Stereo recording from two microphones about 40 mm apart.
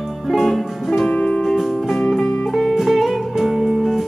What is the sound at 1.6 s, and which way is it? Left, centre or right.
Music, centre.